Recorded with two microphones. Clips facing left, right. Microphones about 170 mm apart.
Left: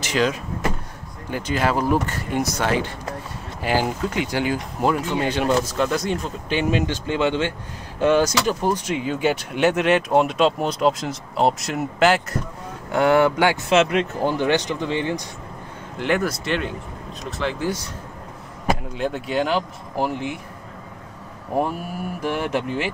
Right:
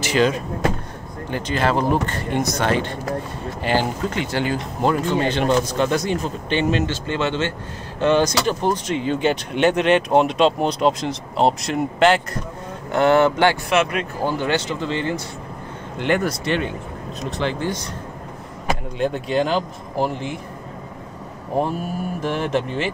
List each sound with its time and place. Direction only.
0.0 s speech: centre (ahead or behind)
13.7 s speech: 25° left (ahead or behind)
16.0 s speech: centre (ahead or behind)
18.9 s speech: 5° left (ahead or behind)
22.2 s speech: 10° left (ahead or behind)